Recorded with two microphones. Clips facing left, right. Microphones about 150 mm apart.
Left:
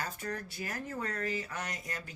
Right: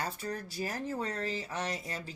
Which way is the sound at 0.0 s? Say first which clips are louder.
Right 2 dB; 30° right (ahead or behind).